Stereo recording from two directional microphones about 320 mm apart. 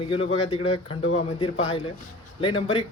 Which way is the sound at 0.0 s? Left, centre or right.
Centre.